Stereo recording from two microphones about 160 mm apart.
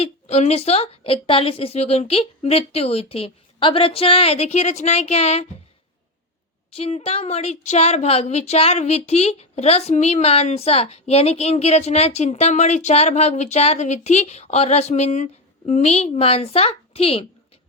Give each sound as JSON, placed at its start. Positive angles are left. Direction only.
{"t": 0.0, "sound": "speech", "side_deg": 45}
{"t": 6.7, "sound": "speech", "side_deg": 40}